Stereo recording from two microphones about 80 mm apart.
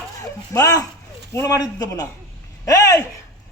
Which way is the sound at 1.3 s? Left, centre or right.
Left.